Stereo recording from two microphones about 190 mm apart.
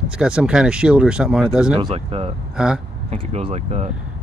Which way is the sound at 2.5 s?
5° right (ahead or behind).